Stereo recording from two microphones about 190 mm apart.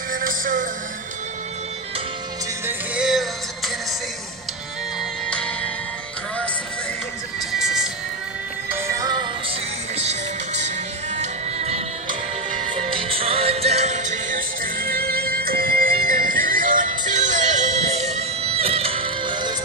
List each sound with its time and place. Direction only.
0.1 s music: 45° right (ahead or behind)
2.6 s music: 5° right (ahead or behind)
5.3 s music: 5° left (ahead or behind)
7.5 s music: centre (ahead or behind)
8.6 s music: 15° right (ahead or behind)
9.9 s music: 35° right (ahead or behind)